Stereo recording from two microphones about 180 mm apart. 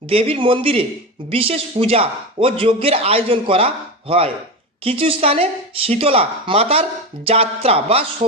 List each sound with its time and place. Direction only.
0.1 s speech: 30° right (ahead or behind)
4.8 s speech: 30° right (ahead or behind)